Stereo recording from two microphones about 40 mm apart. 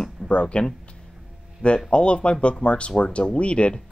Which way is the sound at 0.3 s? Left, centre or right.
Left.